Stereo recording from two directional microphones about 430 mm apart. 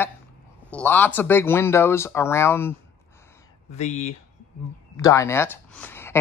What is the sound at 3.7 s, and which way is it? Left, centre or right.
Speech, centre.